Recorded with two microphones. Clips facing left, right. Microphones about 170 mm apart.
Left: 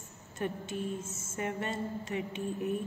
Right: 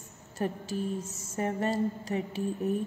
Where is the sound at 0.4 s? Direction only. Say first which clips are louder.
Right 3 dB; 35° right (ahead or behind).